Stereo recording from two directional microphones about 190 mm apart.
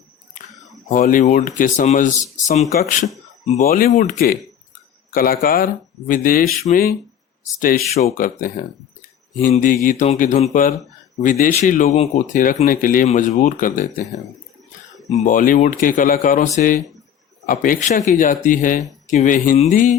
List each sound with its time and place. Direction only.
0.9 s speech: 45° left (ahead or behind)
15.2 s speech: 45° left (ahead or behind)